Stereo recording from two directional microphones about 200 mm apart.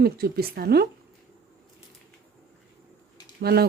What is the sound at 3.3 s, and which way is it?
Speech, 50° right (ahead or behind).